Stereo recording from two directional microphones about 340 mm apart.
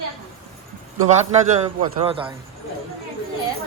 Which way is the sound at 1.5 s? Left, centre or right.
Centre.